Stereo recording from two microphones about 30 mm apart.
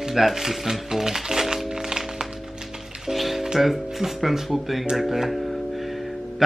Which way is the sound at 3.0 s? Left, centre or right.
Centre.